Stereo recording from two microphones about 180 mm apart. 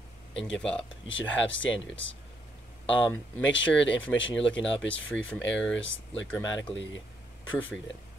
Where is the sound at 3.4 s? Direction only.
90° left.